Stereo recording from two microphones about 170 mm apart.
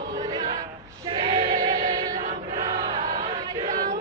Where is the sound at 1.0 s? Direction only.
30° right (ahead or behind).